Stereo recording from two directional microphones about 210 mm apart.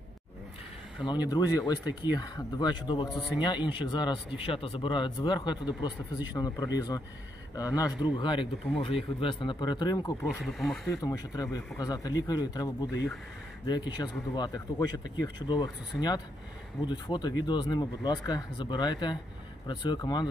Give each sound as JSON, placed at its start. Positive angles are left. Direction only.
{"t": 1.3, "sound": "speech", "side_deg": 15}
{"t": 3.1, "sound": "speech", "side_deg": 0}
{"t": 3.6, "sound": "speech", "side_deg": 20}
{"t": 10.2, "sound": "speech", "side_deg": 0}
{"t": 10.9, "sound": "speech", "side_deg": 15}
{"t": 16.8, "sound": "speech", "side_deg": 20}